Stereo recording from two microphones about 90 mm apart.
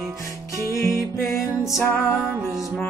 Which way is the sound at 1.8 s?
20° left (ahead or behind).